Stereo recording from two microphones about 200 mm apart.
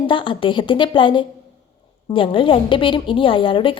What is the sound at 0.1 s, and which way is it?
A woman's voice, 25° left (ahead or behind).